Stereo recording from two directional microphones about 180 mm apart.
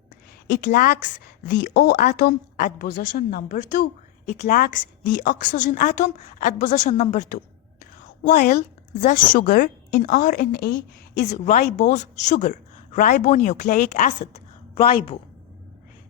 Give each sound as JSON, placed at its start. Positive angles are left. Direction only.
{"t": 0.6, "sound": "a woman's voice", "side_deg": 50}
{"t": 4.3, "sound": "a woman's voice", "side_deg": 45}
{"t": 11.2, "sound": "a woman's voice", "side_deg": 40}
{"t": 14.2, "sound": "a sound", "side_deg": 35}